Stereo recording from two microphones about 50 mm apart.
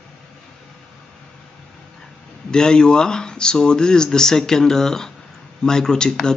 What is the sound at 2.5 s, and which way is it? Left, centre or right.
Speech, centre.